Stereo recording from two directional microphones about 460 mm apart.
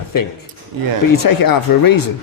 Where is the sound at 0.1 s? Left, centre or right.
Left.